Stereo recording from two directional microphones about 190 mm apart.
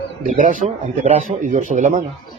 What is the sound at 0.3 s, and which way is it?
A man's voice, 40° right (ahead or behind).